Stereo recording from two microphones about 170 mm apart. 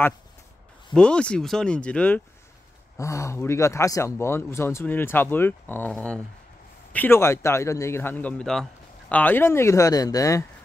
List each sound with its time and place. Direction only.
0.9 s speech: 5° left (ahead or behind)